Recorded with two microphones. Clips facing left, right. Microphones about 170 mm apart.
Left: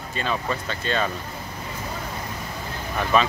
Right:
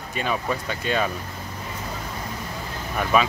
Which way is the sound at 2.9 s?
5° right (ahead or behind).